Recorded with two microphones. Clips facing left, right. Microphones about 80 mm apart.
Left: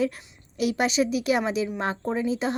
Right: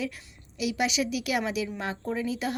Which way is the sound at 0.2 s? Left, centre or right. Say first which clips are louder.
Left 2 dB; left.